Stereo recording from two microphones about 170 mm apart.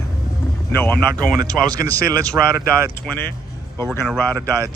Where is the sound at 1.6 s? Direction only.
20° right (ahead or behind).